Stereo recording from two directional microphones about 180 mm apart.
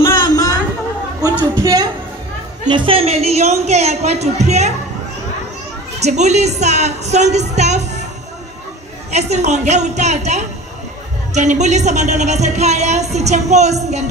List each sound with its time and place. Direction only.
0.2 s a sound: 20° left (ahead or behind)
1.6 s a woman's voice: 20° right (ahead or behind); by 4.7 s 40° right (ahead or behind)
5.9 s a woman's voice: 40° right (ahead or behind)
9.1 s a woman's voice: 40° right (ahead or behind)